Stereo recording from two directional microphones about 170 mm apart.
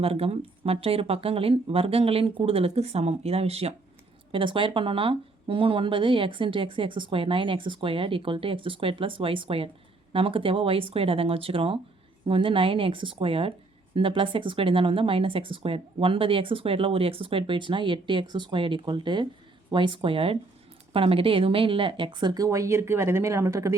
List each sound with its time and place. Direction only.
0.0 s speech: 35° right (ahead or behind); by 23.7 s 20° right (ahead or behind)